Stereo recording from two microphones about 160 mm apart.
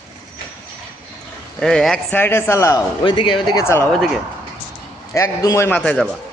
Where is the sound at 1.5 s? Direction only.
Centre (ahead or behind); by 2.8 s 15° left (ahead or behind).